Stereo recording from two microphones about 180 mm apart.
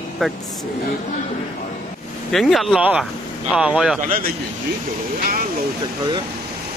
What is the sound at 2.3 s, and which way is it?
Speech, centre (ahead or behind).